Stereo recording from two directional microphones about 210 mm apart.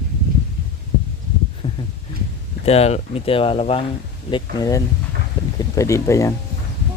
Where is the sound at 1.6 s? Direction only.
25° left (ahead or behind).